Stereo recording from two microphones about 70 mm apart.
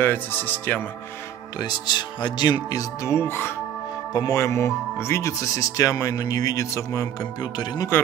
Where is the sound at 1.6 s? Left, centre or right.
Left.